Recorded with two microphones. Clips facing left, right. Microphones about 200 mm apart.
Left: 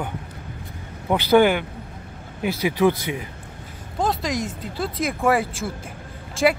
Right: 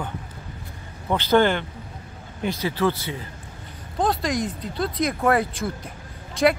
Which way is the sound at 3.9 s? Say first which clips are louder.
Right 1 dB; centre (ahead or behind).